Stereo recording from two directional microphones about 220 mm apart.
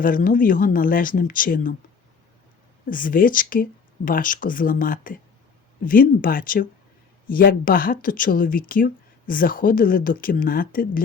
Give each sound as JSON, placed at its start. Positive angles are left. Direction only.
{"t": 0.0, "sound": "speech", "side_deg": 40}
{"t": 2.8, "sound": "speech", "side_deg": 40}